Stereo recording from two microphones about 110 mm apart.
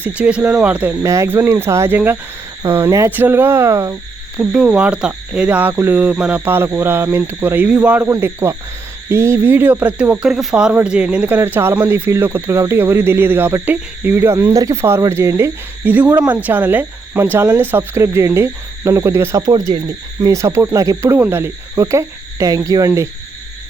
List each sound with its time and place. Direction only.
0.0 s cricket: 10° right (ahead or behind)
1.0 s speech: 25° right (ahead or behind)
4.4 s cricket: 10° right (ahead or behind)
9.0 s speech: 25° right (ahead or behind)
19.5 s speech: 35° right (ahead or behind)